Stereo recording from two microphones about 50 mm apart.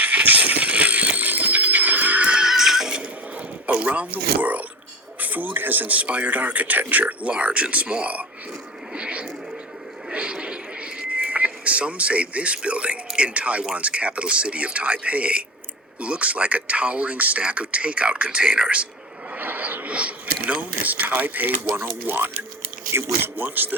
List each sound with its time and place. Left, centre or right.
0.0 s neigh: right
2.3 s music: centre
3.7 s speech: right
9.0 s a sound: right
11.1 s speech: right
19.4 s a sound: right
19.9 s speech: right
20.5 s a man's voice: right
22.9 s a man's voice: right